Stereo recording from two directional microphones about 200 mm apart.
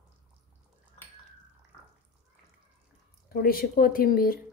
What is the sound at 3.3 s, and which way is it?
A woman's voice, 50° left (ahead or behind).